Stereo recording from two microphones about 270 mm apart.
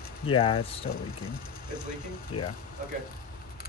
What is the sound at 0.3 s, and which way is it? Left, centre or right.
Speech, centre.